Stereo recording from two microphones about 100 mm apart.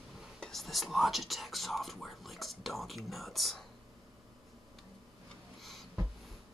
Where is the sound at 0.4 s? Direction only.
Centre (ahead or behind).